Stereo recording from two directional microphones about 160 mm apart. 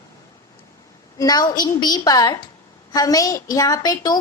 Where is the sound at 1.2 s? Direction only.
25° left (ahead or behind).